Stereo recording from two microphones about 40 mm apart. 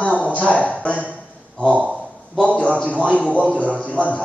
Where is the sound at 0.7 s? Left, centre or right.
Left.